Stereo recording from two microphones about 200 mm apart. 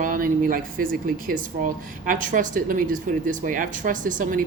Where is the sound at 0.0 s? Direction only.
45° right (ahead or behind).